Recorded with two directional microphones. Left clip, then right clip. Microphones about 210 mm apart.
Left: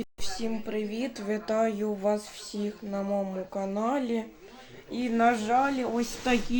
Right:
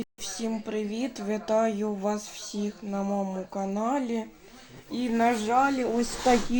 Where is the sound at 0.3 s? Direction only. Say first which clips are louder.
Right 1 dB; 20° right (ahead or behind).